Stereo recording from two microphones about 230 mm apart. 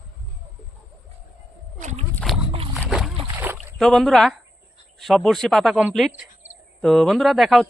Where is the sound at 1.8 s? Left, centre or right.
Right.